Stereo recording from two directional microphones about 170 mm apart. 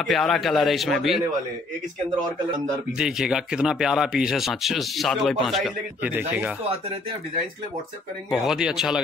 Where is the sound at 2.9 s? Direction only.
5° right (ahead or behind).